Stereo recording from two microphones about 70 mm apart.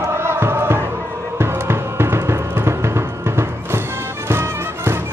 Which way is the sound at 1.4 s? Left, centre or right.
Right.